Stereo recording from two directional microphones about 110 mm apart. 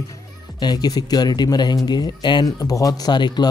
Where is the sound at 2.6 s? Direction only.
30° left (ahead or behind).